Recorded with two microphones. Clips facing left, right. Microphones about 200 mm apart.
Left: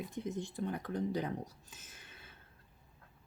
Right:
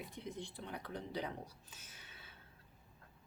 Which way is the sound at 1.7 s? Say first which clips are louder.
Left 2 dB; 45° left (ahead or behind).